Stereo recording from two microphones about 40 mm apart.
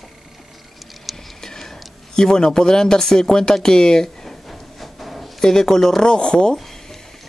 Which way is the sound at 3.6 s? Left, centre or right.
Centre.